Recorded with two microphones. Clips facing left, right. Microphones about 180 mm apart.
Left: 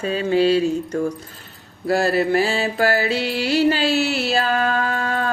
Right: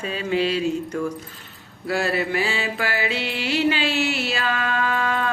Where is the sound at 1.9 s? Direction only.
40° left (ahead or behind).